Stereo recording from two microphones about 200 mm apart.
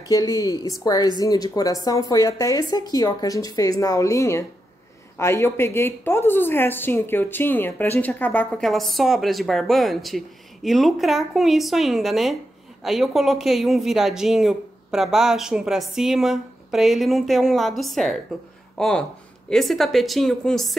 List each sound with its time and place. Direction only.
0.1 s a woman's voice: 15° left (ahead or behind); by 20.7 s centre (ahead or behind)